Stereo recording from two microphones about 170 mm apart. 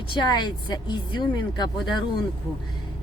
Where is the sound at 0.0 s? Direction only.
25° left (ahead or behind).